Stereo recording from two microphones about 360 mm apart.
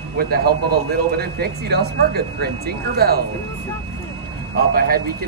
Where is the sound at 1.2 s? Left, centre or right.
Right.